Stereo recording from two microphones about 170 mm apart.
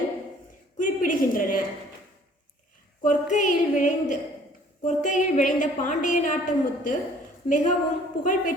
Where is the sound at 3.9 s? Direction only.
50° left (ahead or behind).